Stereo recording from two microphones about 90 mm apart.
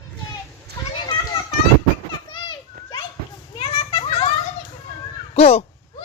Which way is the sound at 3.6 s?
90° left.